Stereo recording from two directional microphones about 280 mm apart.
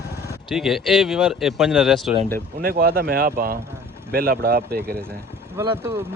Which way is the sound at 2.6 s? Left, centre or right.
Right.